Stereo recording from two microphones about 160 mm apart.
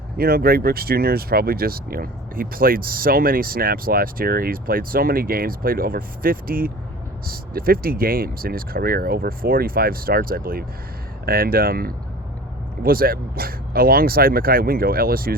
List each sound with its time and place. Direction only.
0.2 s speech: 75° right (ahead or behind)